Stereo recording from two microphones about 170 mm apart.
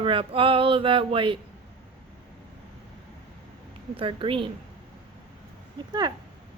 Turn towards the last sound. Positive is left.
turn(degrees=-25)  # may be behind; listen again after turning